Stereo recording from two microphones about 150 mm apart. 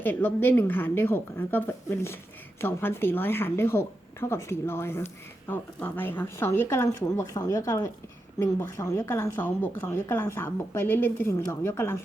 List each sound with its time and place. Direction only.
0.0 s speech: 15° left (ahead or behind)